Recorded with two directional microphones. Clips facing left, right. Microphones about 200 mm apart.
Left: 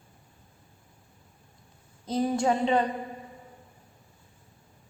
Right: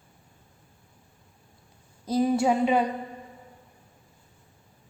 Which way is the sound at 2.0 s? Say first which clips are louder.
Right 3 dB; 10° right (ahead or behind).